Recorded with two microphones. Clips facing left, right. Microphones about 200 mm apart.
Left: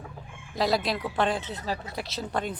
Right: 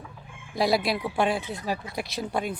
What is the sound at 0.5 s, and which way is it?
Speech, 10° right (ahead or behind).